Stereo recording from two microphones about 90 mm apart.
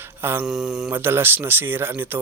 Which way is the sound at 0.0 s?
25° right (ahead or behind).